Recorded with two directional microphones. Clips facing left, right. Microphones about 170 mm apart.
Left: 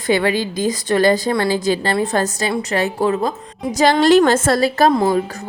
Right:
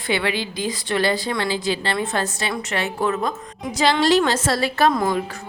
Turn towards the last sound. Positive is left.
turn(degrees=25)  # may be behind; listen again after turning